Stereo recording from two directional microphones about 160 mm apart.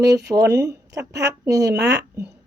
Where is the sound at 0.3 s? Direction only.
15° right (ahead or behind).